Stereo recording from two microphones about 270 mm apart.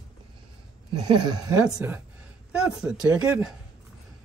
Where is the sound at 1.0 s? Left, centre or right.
Centre.